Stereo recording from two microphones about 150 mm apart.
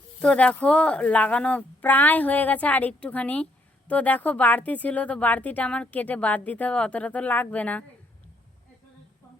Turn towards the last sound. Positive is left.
turn(degrees=10)  # may be behind; listen again after turning